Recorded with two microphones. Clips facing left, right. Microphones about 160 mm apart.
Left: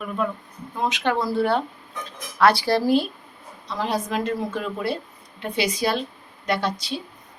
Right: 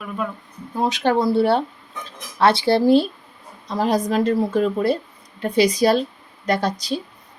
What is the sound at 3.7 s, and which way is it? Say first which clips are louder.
Speech: right 6 dB; 40° right (ahead or behind).